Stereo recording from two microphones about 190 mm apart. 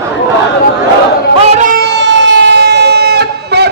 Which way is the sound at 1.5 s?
45° right (ahead or behind).